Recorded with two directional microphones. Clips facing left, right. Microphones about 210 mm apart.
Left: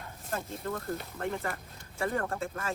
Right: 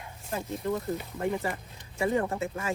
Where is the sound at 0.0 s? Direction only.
10° right (ahead or behind).